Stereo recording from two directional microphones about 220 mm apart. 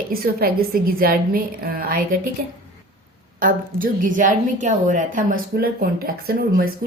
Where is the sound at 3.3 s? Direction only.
40° right (ahead or behind).